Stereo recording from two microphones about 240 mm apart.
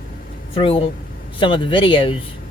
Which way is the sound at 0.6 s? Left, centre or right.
Left.